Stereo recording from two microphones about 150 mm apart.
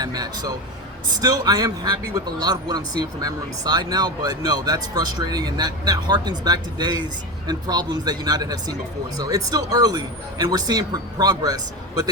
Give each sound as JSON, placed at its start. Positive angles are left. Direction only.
{"t": 0.0, "sound": "a man's voice", "side_deg": -25}